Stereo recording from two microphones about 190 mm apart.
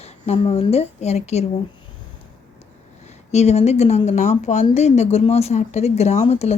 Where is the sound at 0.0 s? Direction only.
30° left (ahead or behind).